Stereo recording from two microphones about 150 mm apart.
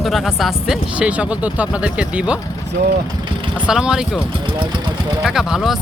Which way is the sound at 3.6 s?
5° right (ahead or behind).